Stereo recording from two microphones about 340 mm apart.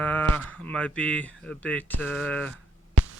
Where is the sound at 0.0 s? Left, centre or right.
Centre.